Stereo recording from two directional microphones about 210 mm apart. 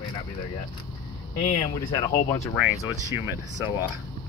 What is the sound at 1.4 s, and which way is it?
Speech, 30° left (ahead or behind).